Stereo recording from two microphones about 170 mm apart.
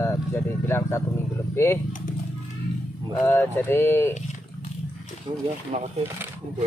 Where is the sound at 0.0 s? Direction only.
15° left (ahead or behind).